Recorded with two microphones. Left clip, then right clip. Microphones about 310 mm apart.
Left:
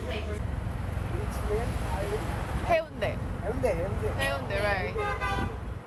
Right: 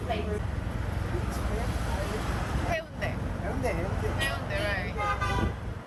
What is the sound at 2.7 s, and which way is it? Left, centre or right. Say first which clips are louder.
Vehicle: left 8 dB; centre.